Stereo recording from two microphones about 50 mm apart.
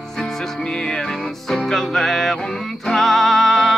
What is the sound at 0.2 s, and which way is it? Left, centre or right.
Music, centre.